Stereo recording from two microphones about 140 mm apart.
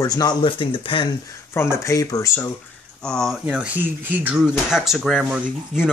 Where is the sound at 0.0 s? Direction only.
25° left (ahead or behind).